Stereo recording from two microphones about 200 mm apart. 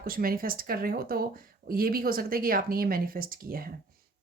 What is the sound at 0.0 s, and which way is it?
Speech, 45° right (ahead or behind).